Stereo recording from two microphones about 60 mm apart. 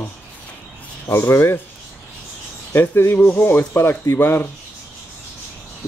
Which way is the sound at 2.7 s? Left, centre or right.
Left.